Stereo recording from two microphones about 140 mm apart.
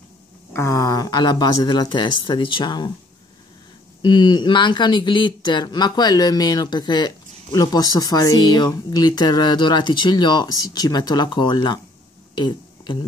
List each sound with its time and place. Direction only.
0.5 s speech: 20° left (ahead or behind)
4.0 s speech: 35° left (ahead or behind)